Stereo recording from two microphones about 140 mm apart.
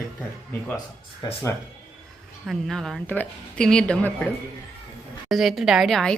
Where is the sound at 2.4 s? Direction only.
Centre (ahead or behind).